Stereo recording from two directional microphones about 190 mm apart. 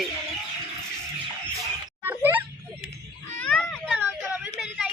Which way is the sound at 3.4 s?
5° left (ahead or behind).